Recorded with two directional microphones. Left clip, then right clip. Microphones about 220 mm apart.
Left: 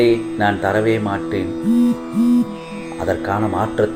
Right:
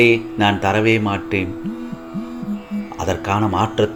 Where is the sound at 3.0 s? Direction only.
65° right (ahead or behind).